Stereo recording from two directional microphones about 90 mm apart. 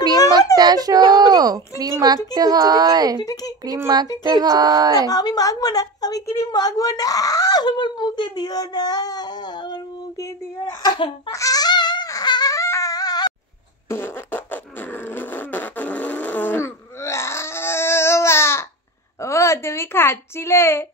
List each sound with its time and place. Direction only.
0.1 s a sound: 40° left (ahead or behind)
0.6 s a child's voice: 50° right (ahead or behind)
3.3 s a woman's voice: 45° left (ahead or behind)
3.6 s a child's voice: 45° right (ahead or behind)
5.1 s a woman's voice: 45° left (ahead or behind)
10.1 s speech: 40° left (ahead or behind)
11.2 s a sound: 40° left (ahead or behind)
12.5 s a sound: 35° left (ahead or behind)
13.8 s fart: 25° left (ahead or behind)
19.1 s a child's voice: 35° left (ahead or behind)